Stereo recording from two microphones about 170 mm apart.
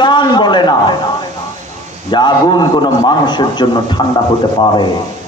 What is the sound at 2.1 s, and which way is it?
A man's voice, 25° left (ahead or behind).